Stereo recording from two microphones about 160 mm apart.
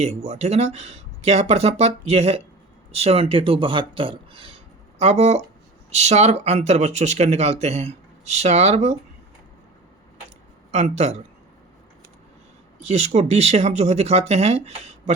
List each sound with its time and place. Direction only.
0.0 s speech: 45° right (ahead or behind)
10.7 s speech: 45° right (ahead or behind)
12.8 s speech: 45° right (ahead or behind)